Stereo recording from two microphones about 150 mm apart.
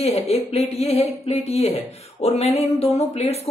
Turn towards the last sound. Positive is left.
turn(degrees=45)  # may be behind; listen again after turning